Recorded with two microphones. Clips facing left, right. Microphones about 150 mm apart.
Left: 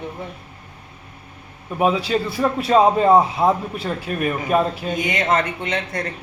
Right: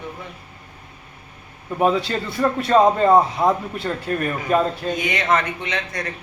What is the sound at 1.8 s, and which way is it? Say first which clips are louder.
A man's voice: left 1 dB; 10° left (ahead or behind).